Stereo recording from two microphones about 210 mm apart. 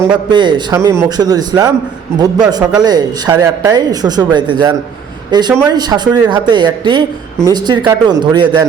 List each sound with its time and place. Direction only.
0.3 s speech: 20° right (ahead or behind)